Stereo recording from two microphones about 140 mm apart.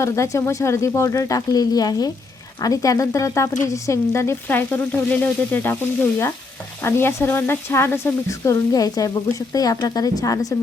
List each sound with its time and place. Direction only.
0.0 s speech: 20° left (ahead or behind)
3.7 s frying: 20° left (ahead or behind)
6.8 s speech: 15° left (ahead or behind)